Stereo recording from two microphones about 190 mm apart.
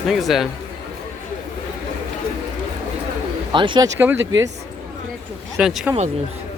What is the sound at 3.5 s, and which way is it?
Speech, 25° right (ahead or behind).